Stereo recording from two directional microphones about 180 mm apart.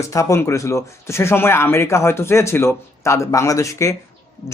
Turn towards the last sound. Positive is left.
turn(degrees=15)  # may be behind; listen again after turning